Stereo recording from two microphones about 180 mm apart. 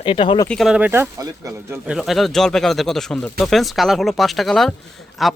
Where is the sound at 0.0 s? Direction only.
30° left (ahead or behind).